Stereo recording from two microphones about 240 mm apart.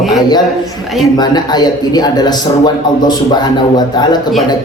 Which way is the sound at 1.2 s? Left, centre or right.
Centre.